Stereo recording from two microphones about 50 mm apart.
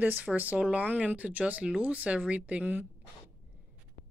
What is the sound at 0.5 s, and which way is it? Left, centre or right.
Speech, right.